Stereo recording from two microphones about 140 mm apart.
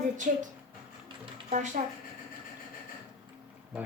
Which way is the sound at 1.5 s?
65° right (ahead or behind).